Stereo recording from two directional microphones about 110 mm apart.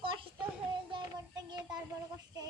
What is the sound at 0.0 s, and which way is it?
Child singing, 50° right (ahead or behind).